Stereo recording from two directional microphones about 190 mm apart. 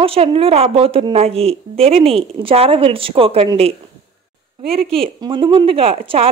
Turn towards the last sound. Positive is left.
turn(degrees=-30)  # may be behind; listen again after turning